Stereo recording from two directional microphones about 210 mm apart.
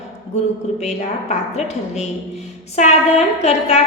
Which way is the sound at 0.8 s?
30° left (ahead or behind).